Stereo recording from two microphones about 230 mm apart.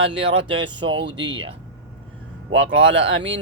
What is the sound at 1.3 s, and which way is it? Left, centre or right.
Speech, right.